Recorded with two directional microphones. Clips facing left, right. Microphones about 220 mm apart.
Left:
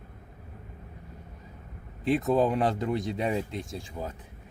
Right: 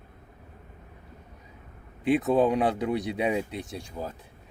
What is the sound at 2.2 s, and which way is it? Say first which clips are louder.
Speech: right 1 dB; centre (ahead or behind).